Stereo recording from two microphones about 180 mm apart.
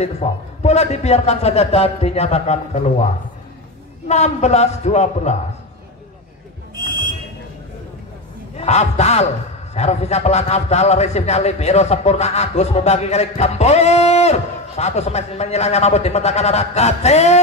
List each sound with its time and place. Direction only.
0.0 s a man's voice: 40° left (ahead or behind)
4.1 s a man's voice: 40° left (ahead or behind)
8.5 s a man's voice: 40° left (ahead or behind)